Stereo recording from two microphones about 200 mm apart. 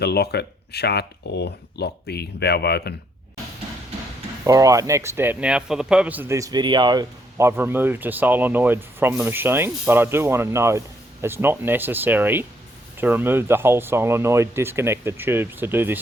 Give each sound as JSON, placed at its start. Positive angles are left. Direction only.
{"t": 0.0, "sound": "speech", "side_deg": 55}
{"t": 4.4, "sound": "speech", "side_deg": -15}